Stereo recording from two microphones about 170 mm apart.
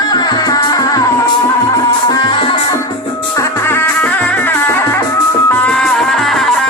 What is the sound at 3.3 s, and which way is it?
Music, 15° left (ahead or behind).